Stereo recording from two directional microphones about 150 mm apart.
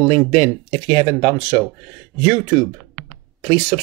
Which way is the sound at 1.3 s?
10° right (ahead or behind).